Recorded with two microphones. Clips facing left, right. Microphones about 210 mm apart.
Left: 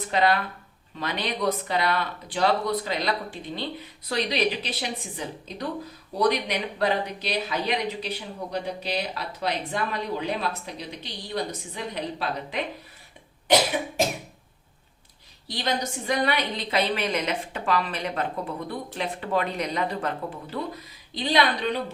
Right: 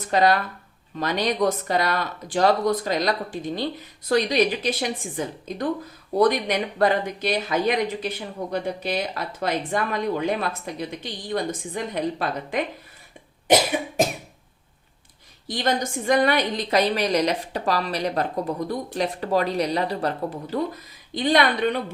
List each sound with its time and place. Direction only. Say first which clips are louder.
0.1 s speech: right 3 dB; 40° right (ahead or behind)
15.4 s a woman's voice: right 4 dB; 50° right (ahead or behind)
21.1 s speech: right 3 dB; 55° right (ahead or behind)